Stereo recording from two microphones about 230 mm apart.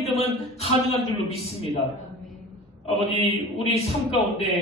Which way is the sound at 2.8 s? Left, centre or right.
Left.